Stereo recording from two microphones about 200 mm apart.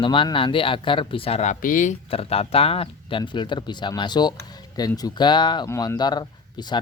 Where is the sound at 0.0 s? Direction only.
25° left (ahead or behind).